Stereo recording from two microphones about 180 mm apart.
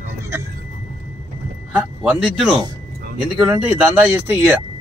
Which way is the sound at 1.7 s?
5° right (ahead or behind).